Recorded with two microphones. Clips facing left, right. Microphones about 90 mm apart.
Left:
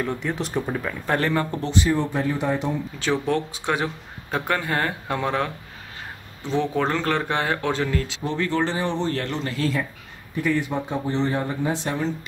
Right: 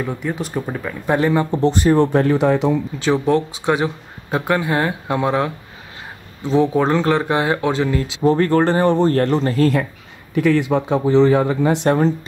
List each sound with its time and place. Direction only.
0.0 s speech: 5° right (ahead or behind)
1.6 s speech: 45° right (ahead or behind); by 2.7 s 90° right
3.1 s speech: 5° right (ahead or behind)
6.5 s speech: 10° right (ahead or behind)
8.2 s speech: 45° right (ahead or behind)
10.3 s speech: 90° right; by 12.0 s 70° right (ahead or behind)